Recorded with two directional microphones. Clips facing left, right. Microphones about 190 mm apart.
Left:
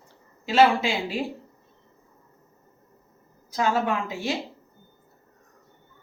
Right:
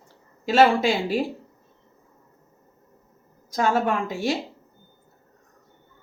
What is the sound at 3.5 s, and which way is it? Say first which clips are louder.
Speech: right 2 dB; 45° right (ahead or behind).